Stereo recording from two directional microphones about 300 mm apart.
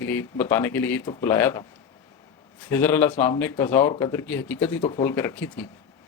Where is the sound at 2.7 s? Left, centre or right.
Centre.